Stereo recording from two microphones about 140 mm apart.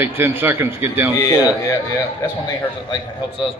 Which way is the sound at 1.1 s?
25° left (ahead or behind).